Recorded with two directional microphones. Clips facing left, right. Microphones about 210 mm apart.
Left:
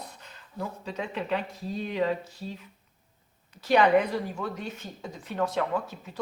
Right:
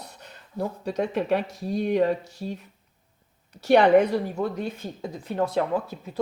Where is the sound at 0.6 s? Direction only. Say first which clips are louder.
Right 7 dB; 40° right (ahead or behind).